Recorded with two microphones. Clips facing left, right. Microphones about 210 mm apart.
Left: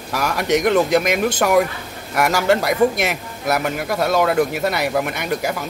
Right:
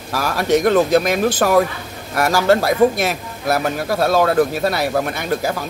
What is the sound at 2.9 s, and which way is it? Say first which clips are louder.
Speech: right 1 dB; 20° left (ahead or behind).